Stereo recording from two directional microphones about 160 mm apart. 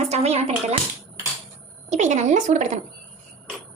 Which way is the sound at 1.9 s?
45° right (ahead or behind).